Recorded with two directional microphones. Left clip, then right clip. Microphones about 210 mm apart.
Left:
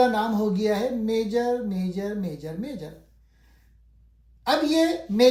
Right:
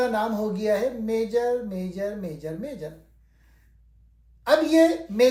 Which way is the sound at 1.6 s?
25° left (ahead or behind).